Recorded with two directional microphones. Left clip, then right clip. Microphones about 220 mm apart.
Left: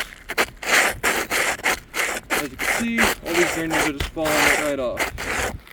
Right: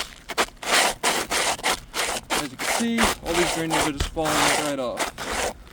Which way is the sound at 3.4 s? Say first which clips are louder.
Left 2 dB; 20° right (ahead or behind).